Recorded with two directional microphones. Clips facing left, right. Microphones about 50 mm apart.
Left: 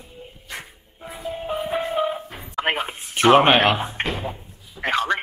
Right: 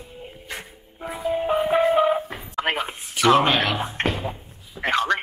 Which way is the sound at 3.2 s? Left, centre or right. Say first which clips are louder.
Left 3 dB; left.